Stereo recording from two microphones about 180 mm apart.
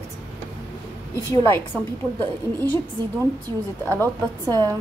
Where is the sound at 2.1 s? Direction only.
10° left (ahead or behind).